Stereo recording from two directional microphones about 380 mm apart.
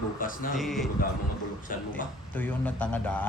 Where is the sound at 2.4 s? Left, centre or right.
Centre.